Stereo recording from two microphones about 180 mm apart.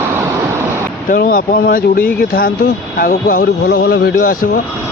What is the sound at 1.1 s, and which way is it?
Speech, 55° left (ahead or behind).